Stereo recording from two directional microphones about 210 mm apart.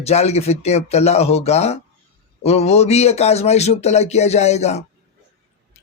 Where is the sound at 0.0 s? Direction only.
30° left (ahead or behind).